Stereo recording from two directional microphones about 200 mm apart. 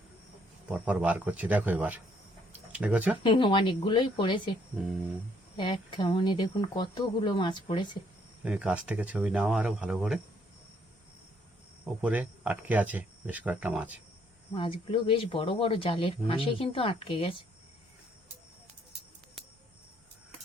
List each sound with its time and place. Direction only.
0.7 s speech: 5° right (ahead or behind)
2.5 s a sound: 5° right (ahead or behind)
3.2 s speech: 25° left (ahead or behind)
5.5 s speech: 25° left (ahead or behind)
8.4 s speech: 5° right (ahead or behind)
12.0 s speech: 5° right (ahead or behind)
14.5 s speech: 25° left (ahead or behind)